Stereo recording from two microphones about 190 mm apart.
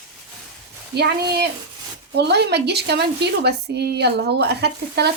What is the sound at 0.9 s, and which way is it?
A woman's voice, 60° right (ahead or behind).